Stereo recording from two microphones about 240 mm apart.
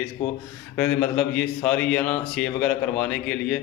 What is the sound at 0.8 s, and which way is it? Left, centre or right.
A man's voice, centre.